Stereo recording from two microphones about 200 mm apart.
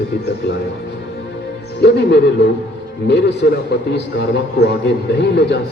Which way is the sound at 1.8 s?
60° left (ahead or behind).